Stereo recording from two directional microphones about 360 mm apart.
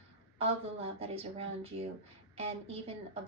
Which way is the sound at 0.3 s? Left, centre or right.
Centre.